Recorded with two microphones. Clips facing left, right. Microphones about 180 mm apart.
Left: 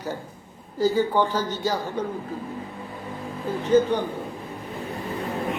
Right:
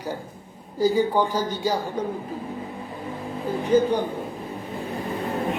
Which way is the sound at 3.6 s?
10° right (ahead or behind).